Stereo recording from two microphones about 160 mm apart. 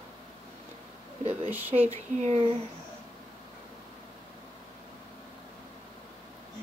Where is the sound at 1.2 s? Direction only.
40° right (ahead or behind).